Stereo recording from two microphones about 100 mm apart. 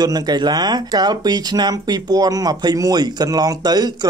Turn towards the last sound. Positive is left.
turn(degrees=-45)  # may be behind; listen again after turning